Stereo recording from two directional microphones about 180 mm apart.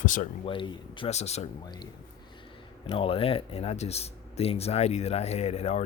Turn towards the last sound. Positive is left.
turn(degrees=35)  # may be behind; listen again after turning